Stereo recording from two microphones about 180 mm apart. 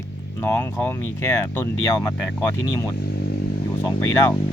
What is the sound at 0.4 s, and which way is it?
Speech, 15° left (ahead or behind).